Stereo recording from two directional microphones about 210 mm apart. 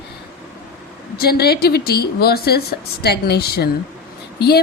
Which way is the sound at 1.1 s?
50° left (ahead or behind).